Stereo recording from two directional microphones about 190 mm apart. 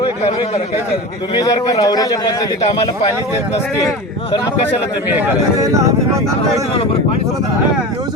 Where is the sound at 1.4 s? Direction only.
20° left (ahead or behind).